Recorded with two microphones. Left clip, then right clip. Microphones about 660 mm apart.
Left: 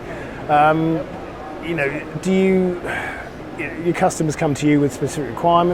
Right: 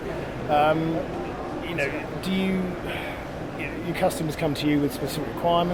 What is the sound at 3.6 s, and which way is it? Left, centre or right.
Speech, left.